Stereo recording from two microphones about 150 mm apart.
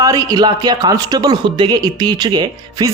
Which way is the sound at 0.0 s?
20° right (ahead or behind).